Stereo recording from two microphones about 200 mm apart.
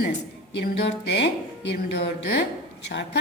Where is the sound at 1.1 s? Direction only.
60° left (ahead or behind).